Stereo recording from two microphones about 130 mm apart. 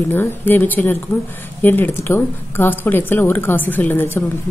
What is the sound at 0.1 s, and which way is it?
Speech, 15° left (ahead or behind).